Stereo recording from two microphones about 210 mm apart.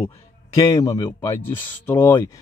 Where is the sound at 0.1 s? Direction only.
15° left (ahead or behind).